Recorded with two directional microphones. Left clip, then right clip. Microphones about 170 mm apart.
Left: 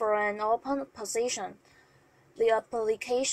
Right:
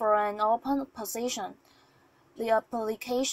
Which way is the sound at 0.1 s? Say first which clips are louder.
Right 2 dB; 25° right (ahead or behind).